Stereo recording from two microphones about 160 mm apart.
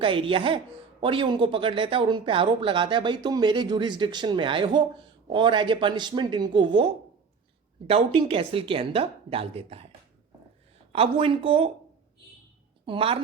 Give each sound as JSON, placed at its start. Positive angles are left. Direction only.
{"t": 0.0, "sound": "a woman's voice", "side_deg": -35}
{"t": 10.9, "sound": "a woman's voice", "side_deg": -35}
{"t": 12.8, "sound": "a woman's voice", "side_deg": -35}